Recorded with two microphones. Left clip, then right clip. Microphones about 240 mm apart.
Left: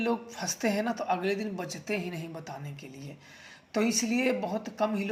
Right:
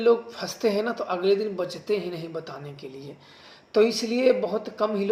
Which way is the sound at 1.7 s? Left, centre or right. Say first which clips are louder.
Right 6 dB; left.